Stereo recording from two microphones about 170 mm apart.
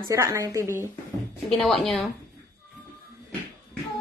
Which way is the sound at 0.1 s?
20° right (ahead or behind).